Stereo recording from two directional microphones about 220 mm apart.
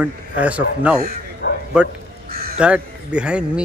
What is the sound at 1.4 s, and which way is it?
Bow-wow, 45° left (ahead or behind).